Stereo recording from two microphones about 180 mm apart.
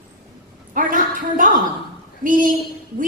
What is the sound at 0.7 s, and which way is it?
A woman's voice, 50° right (ahead or behind).